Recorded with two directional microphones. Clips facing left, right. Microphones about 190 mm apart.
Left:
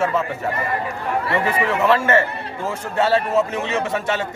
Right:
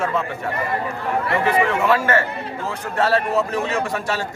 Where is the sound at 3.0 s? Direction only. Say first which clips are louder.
Left 1 dB; 25° left (ahead or behind).